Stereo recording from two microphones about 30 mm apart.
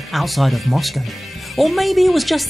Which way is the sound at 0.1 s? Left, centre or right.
Centre.